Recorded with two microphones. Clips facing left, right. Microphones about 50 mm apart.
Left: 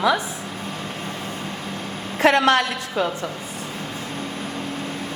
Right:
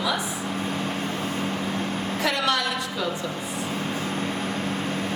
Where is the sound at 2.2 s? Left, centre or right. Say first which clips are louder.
Left 9 dB; left.